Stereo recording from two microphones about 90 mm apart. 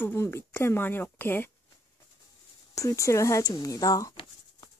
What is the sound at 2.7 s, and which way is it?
Speech, 35° left (ahead or behind).